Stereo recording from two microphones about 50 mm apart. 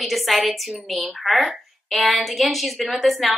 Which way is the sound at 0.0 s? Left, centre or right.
Centre.